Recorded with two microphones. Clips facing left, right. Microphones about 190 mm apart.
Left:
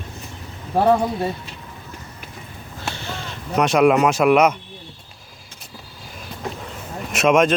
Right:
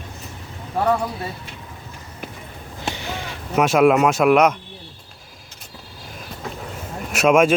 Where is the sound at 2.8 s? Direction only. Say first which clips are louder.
Right 2 dB; 15° right (ahead or behind); by 4.6 s centre (ahead or behind).